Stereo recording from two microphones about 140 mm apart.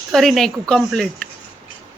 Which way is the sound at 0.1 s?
Centre (ahead or behind).